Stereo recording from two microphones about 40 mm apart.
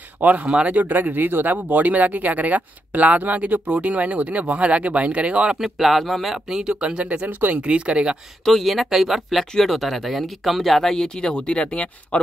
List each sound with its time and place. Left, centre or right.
0.2 s speech: right
0.5 s speech: right
0.7 s speech: right
5.6 s speech: centre
6.3 s speech: centre
7.2 s speech: right
7.5 s speech: right
8.5 s speech: centre
11.3 s speech: left